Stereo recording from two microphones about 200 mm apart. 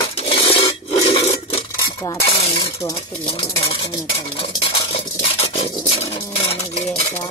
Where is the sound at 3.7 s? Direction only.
25° left (ahead or behind).